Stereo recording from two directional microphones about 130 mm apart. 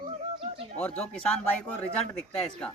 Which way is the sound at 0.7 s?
10° left (ahead or behind).